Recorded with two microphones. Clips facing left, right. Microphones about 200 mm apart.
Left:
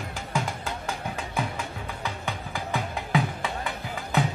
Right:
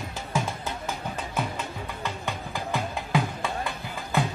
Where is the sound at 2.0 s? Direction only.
15° left (ahead or behind).